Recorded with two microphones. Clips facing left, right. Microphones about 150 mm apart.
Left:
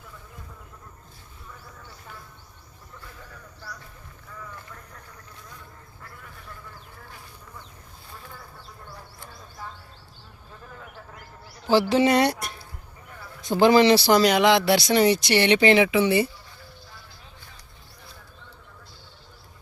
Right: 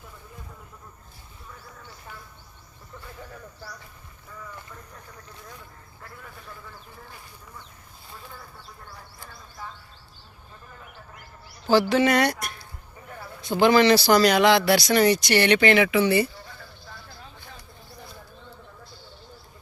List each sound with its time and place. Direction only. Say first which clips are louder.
11.7 s speech: even; 30° left (ahead or behind)
13.6 s speech: left 1 dB; 30° left (ahead or behind)